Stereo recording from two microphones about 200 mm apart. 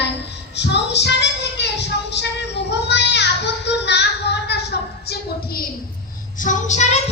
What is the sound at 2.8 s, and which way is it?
Child singing, 60° left (ahead or behind).